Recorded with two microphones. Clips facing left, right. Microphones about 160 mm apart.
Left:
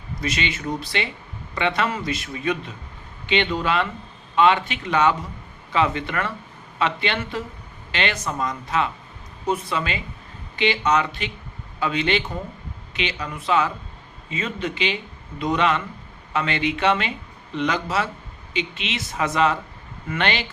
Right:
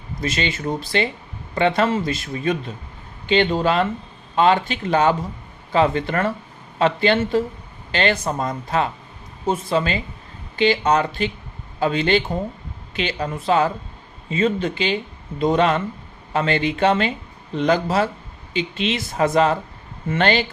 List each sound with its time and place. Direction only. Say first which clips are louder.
0.2 s a man's voice: right 3 dB; 35° right (ahead or behind)